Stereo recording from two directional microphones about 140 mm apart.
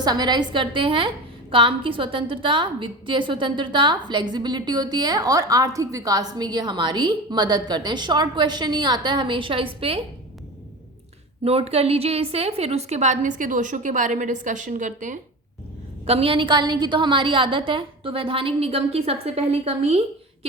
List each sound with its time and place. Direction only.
0.0 s a woman's voice: 30° right (ahead or behind)
11.4 s a woman's voice: 45° right (ahead or behind); by 15.2 s 65° right (ahead or behind)
16.0 s a woman's voice: 45° right (ahead or behind)